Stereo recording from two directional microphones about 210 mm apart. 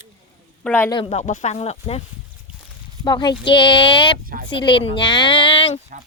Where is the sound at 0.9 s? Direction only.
25° left (ahead or behind).